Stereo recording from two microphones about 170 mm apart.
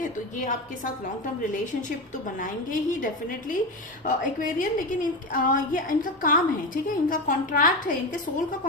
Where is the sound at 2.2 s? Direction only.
50° left (ahead or behind).